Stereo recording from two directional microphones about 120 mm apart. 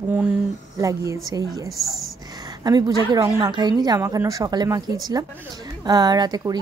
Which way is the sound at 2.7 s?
35° right (ahead or behind).